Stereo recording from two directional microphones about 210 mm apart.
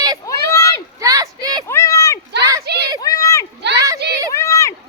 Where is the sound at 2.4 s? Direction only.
15° right (ahead or behind).